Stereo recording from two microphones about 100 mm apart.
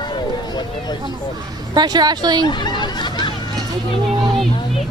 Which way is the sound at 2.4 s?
50° left (ahead or behind).